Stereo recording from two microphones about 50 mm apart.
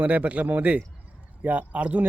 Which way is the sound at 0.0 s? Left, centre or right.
Right.